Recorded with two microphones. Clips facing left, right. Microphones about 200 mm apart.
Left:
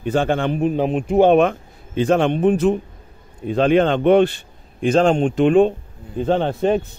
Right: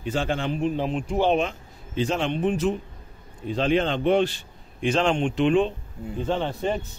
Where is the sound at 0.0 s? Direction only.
55° left (ahead or behind).